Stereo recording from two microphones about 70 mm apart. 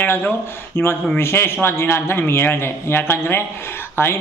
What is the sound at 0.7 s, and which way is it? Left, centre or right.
A man's voice, left.